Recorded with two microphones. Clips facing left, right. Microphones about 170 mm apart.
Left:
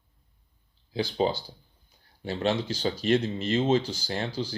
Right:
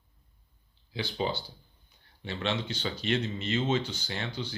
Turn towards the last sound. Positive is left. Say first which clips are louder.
# left 5 dB
turn(degrees=35)  # may be behind; listen again after turning